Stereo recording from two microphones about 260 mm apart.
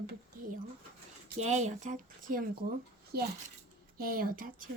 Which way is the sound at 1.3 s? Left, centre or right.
Right.